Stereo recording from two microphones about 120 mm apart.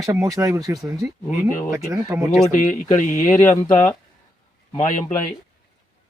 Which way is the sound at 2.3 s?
90° left.